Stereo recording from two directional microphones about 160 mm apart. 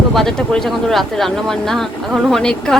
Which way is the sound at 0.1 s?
Centre (ahead or behind).